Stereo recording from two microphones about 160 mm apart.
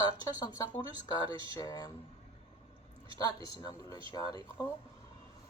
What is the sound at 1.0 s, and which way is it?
Speech, 25° left (ahead or behind).